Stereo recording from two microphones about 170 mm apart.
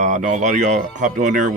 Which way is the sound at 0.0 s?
45° right (ahead or behind).